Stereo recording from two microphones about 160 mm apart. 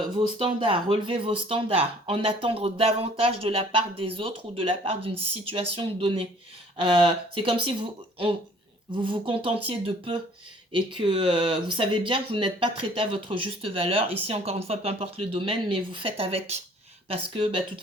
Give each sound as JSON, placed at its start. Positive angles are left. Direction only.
{"t": 0.3, "sound": "speech", "side_deg": -30}